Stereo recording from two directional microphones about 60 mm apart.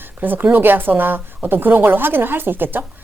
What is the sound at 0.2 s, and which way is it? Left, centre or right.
Speech, right.